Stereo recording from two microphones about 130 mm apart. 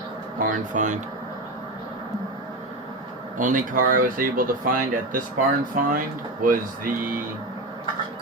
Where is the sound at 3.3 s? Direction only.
90° right.